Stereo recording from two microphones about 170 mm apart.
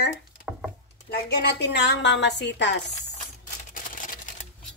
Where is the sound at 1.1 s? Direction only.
85° left.